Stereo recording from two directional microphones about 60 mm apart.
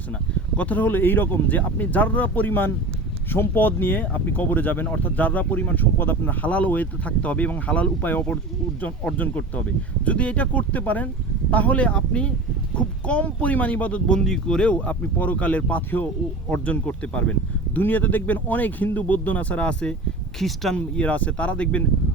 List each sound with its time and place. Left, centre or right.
0.5 s speech: left
14.1 s speech: centre
20.4 s speech: centre
20.7 s speech: left